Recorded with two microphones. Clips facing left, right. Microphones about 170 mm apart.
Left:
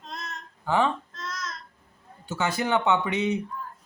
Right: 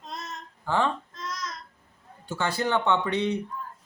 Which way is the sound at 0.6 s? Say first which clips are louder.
Left 2 dB; 15° left (ahead or behind).